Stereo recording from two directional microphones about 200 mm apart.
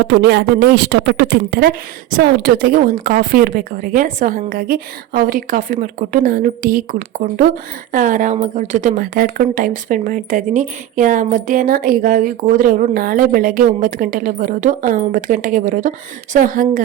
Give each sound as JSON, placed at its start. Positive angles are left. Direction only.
{"t": 0.0, "sound": "speech", "side_deg": -55}
{"t": 7.9, "sound": "a woman's voice", "side_deg": -40}